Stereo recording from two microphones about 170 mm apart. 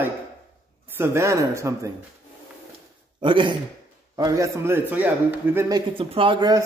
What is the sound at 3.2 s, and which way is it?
A man's voice, 30° right (ahead or behind).